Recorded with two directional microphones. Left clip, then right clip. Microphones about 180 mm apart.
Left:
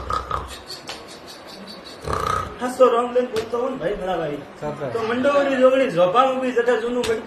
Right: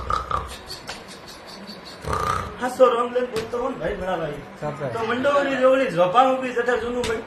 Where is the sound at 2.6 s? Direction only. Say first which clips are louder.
Left 1 dB; 15° left (ahead or behind).